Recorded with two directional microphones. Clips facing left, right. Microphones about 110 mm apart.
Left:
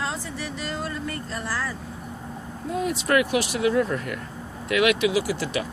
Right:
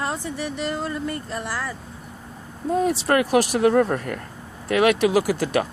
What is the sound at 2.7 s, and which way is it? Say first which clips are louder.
Speech: right 3 dB; 35° right (ahead or behind).